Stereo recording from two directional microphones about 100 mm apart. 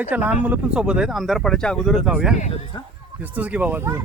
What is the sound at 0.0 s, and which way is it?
Speech, 15° right (ahead or behind).